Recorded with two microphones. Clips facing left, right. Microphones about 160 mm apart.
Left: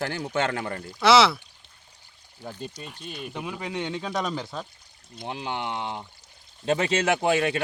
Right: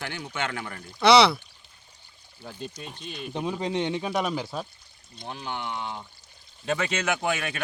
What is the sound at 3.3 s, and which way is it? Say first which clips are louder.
Speech: right 5 dB; 25° right (ahead or behind).